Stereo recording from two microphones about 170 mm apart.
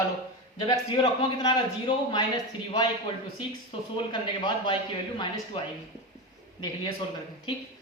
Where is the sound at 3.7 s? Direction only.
30° left (ahead or behind).